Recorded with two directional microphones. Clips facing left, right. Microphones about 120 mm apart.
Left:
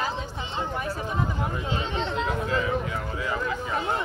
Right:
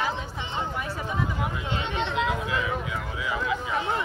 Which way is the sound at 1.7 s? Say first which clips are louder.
Even; 35° left (ahead or behind).